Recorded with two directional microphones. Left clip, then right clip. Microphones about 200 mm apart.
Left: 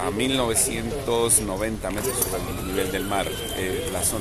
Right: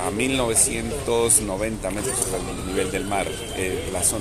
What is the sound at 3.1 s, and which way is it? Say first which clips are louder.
Speech: even; 5° right (ahead or behind).